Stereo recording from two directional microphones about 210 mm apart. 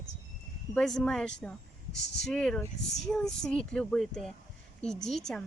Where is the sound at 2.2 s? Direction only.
5° left (ahead or behind).